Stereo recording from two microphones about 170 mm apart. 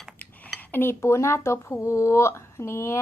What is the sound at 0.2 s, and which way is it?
Dishes, 10° left (ahead or behind).